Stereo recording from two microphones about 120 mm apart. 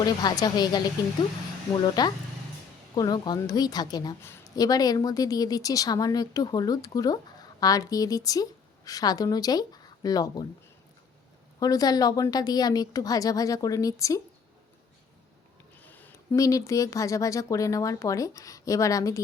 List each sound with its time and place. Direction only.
0.0 s a woman's voice: 35° left (ahead or behind)
1.8 s a woman's voice: 40° left (ahead or behind)
11.6 s a woman's voice: 30° left (ahead or behind)
15.8 s a sound: 15° left (ahead or behind)
16.1 s speech: 25° left (ahead or behind)